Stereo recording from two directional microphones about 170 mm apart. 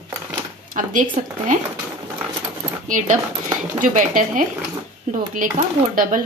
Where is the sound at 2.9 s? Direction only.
50° right (ahead or behind).